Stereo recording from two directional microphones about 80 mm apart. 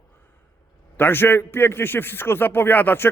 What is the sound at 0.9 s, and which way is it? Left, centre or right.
A man's voice, left.